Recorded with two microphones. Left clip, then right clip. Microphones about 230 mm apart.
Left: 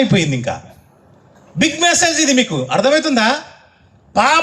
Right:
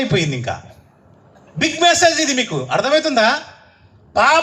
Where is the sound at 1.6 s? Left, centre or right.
Left.